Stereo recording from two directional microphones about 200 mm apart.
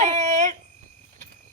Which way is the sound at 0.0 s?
35° right (ahead or behind).